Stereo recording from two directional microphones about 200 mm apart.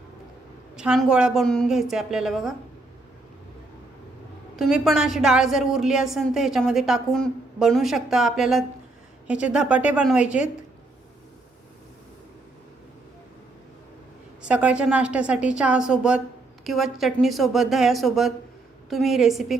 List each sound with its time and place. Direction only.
0.8 s a woman's voice: 5° right (ahead or behind)
4.5 s a woman's voice: centre (ahead or behind)
14.4 s a woman's voice: 5° right (ahead or behind)